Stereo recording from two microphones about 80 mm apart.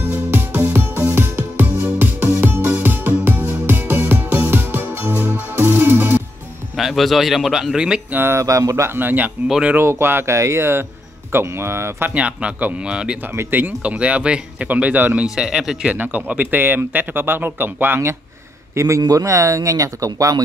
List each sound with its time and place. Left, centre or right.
0.3 s music: right
6.8 s a man's voice: centre
8.1 s speech: right
8.4 s speech: right
8.9 s speech: right
9.5 s speech: centre
9.8 s speech: right
12.1 s speech: centre
13.3 s speech: right
15.2 s speech: centre; by 18.1 s right
18.8 s speech: right